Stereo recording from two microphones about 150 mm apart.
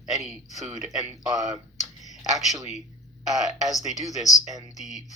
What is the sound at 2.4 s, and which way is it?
Speech, centre (ahead or behind).